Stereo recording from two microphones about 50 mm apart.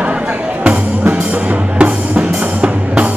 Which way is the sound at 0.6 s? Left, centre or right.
Right.